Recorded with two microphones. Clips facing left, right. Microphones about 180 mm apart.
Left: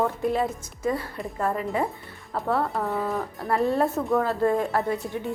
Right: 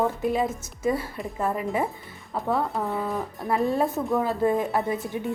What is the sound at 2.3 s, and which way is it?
A woman's voice, centre (ahead or behind).